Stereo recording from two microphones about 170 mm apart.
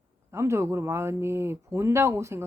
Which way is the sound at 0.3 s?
15° right (ahead or behind).